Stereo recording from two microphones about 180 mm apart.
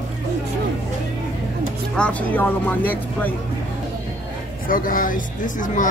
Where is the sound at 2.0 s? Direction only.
5° left (ahead or behind).